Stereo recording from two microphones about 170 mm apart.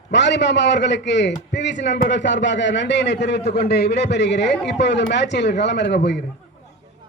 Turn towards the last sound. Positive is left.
turn(degrees=90)